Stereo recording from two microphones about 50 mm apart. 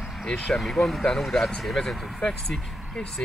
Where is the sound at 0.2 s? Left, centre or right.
Centre.